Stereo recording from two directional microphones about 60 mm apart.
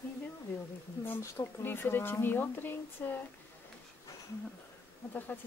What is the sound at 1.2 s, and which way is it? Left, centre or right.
Speech, left.